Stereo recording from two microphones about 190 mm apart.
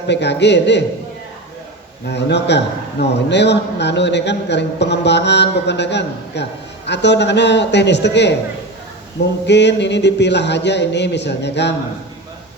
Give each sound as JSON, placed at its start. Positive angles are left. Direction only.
{"t": 0.1, "sound": "a man's voice", "side_deg": 65}
{"t": 2.0, "sound": "a man's voice", "side_deg": 65}
{"t": 9.5, "sound": "a man's voice", "side_deg": 65}